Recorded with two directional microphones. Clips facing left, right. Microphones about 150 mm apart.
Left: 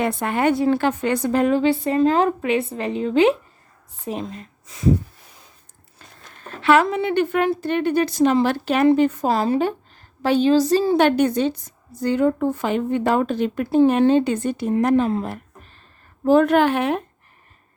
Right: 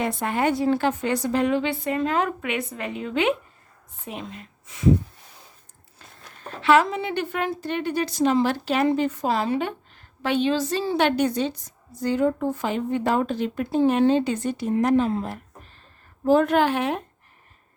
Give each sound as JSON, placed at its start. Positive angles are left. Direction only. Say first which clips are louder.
{"t": 0.0, "sound": "a woman's voice", "louder": "left 3 dB", "side_deg": 60}
{"t": 6.6, "sound": "a woman's voice", "louder": "left 2 dB", "side_deg": 55}
{"t": 9.2, "sound": "a woman's voice", "louder": "left 4 dB", "side_deg": 40}
{"t": 12.0, "sound": "a woman's voice", "louder": "left 3 dB", "side_deg": 65}